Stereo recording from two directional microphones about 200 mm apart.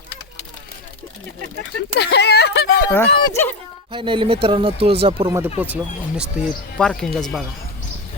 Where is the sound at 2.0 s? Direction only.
55° left (ahead or behind).